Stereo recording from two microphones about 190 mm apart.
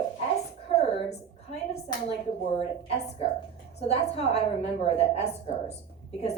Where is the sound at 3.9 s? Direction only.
35° left (ahead or behind).